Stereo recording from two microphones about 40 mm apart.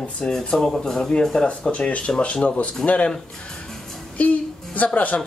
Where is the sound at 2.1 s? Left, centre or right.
Left.